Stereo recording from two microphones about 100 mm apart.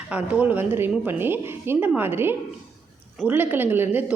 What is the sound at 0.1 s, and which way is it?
A woman's voice, 15° right (ahead or behind).